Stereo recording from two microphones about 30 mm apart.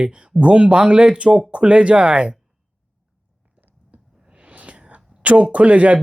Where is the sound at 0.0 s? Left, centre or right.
Right.